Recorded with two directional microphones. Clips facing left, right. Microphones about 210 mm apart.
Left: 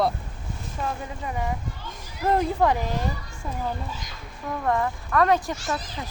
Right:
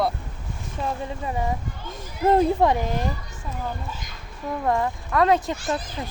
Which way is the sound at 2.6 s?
25° right (ahead or behind).